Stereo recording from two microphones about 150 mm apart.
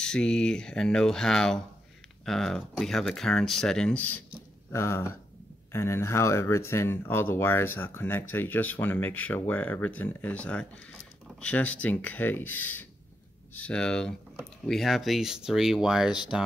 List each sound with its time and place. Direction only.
0.0 s speech: 5° left (ahead or behind)